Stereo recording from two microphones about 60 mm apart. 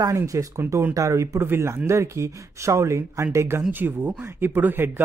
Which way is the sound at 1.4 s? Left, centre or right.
Right.